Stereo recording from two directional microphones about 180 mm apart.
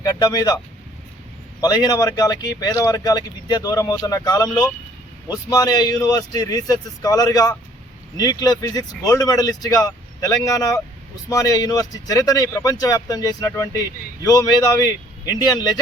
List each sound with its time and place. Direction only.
0.0 s speech: 20° left (ahead or behind)
1.6 s speech: 20° left (ahead or behind)